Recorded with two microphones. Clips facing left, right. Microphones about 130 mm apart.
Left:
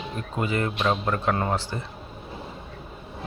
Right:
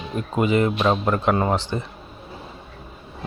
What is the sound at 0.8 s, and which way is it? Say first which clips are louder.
Speech: right 4 dB; 30° right (ahead or behind).